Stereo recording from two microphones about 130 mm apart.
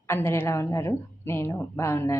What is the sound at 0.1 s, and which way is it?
A woman's voice, 20° left (ahead or behind).